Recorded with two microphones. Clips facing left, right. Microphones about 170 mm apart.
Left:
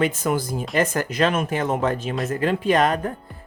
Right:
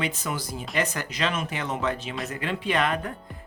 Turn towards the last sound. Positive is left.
turn(degrees=40)  # may be behind; listen again after turning